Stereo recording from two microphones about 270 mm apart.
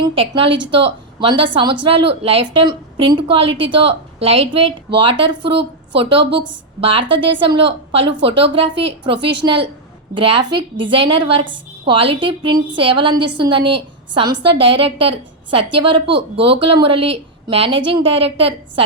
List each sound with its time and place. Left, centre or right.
0.1 s a woman's voice: centre